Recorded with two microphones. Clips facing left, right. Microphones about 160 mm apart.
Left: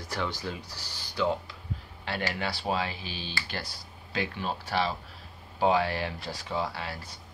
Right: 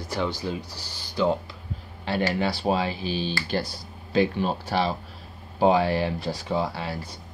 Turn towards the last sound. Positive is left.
turn(degrees=-30)  # may be behind; listen again after turning